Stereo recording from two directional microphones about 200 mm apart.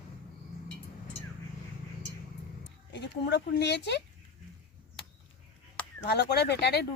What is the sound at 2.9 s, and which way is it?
Speech, 60° left (ahead or behind).